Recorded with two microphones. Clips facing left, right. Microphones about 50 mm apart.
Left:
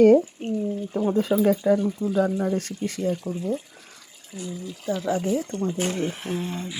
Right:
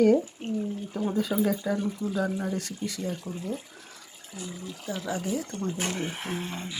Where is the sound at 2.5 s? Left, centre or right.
Left.